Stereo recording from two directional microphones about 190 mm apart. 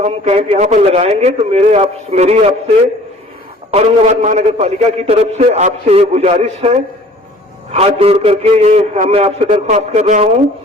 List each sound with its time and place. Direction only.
0.0 s a man's voice: 30° right (ahead or behind)
3.7 s a man's voice: 30° right (ahead or behind)